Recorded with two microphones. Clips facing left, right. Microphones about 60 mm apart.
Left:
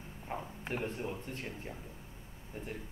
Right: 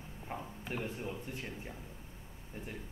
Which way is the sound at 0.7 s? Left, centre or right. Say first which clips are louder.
Left 2 dB; left.